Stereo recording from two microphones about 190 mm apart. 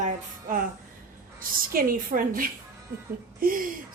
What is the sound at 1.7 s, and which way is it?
Speech, 50° right (ahead or behind).